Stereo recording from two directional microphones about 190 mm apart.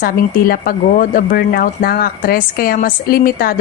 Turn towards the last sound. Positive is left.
turn(degrees=50)  # may be behind; listen again after turning